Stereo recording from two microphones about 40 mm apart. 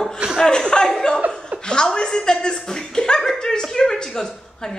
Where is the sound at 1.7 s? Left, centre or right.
Left.